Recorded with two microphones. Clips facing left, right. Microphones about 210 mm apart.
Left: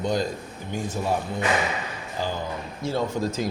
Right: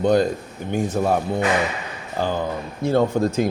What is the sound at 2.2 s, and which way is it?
Speech, 55° right (ahead or behind).